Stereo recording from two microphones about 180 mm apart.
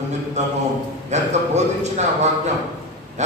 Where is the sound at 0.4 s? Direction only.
40° right (ahead or behind).